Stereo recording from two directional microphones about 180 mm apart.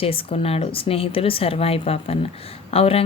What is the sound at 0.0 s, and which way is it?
Speech, 30° left (ahead or behind).